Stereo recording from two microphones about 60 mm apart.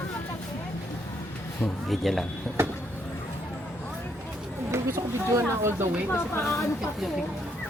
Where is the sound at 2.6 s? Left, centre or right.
Right.